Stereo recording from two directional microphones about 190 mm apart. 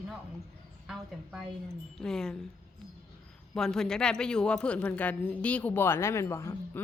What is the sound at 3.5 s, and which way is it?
Speech, 5° left (ahead or behind).